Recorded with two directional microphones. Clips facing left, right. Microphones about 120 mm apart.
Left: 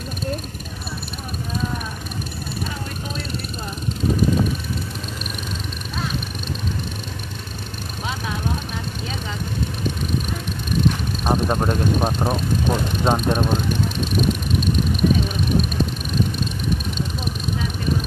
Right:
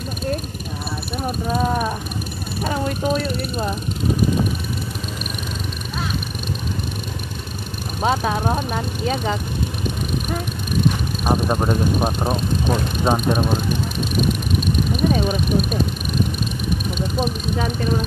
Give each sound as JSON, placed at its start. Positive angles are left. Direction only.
{"t": 1.5, "sound": "vehicle", "side_deg": -55}
{"t": 8.0, "sound": "vehicle", "side_deg": -50}
{"t": 11.2, "sound": "speech", "side_deg": -5}
{"t": 15.0, "sound": "a sound", "side_deg": -45}